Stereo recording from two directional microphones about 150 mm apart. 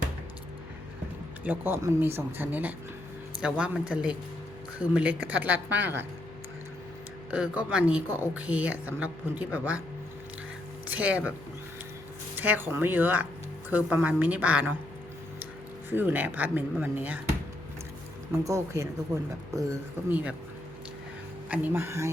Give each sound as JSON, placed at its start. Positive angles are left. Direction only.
{"t": 1.5, "sound": "speech", "side_deg": -15}
{"t": 7.3, "sound": "speech", "side_deg": -10}
{"t": 10.8, "sound": "speech", "side_deg": -10}
{"t": 12.4, "sound": "speech", "side_deg": -10}
{"t": 15.9, "sound": "speech", "side_deg": -15}
{"t": 18.3, "sound": "speech", "side_deg": -20}
{"t": 21.5, "sound": "speech", "side_deg": -10}